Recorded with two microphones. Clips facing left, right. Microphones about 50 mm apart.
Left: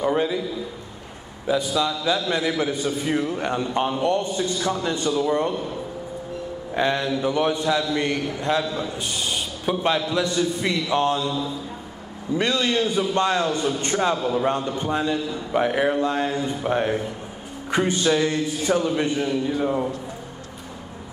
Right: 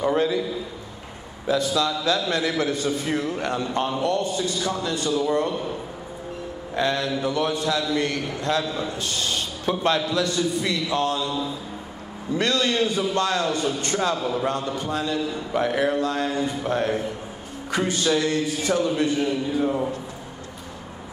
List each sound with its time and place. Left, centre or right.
0.0 s a sound: centre
1.5 s a man's voice: centre
6.7 s a man's voice: centre
10.0 s a man's voice: left
12.4 s a man's voice: centre
13.9 s speech: centre
14.8 s a man's voice: left
19.1 s speech: centre